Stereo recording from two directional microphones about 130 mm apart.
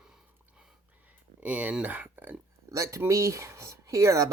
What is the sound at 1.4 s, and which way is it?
Speech, 10° right (ahead or behind).